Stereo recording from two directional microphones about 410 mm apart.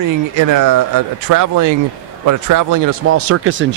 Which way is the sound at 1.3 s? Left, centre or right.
Right.